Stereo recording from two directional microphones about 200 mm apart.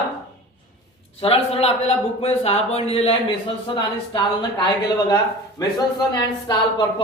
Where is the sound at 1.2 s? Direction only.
30° left (ahead or behind).